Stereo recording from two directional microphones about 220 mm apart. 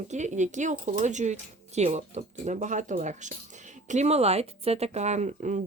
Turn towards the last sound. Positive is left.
turn(degrees=-35)  # may be behind; listen again after turning